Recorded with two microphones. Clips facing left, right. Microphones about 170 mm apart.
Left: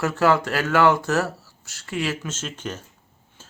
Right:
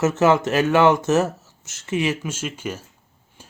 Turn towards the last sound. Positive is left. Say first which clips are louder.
# right 3 dB
turn(degrees=-15)  # may be behind; listen again after turning